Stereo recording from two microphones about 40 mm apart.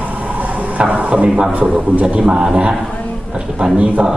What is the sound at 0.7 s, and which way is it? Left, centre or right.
Speech, right.